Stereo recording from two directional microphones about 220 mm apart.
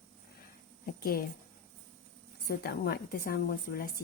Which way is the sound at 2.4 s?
45° left (ahead or behind).